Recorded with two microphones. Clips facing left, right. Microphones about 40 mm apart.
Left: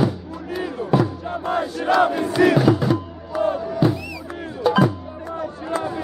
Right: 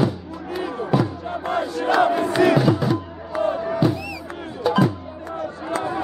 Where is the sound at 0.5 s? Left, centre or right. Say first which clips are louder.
Left 1 dB; centre.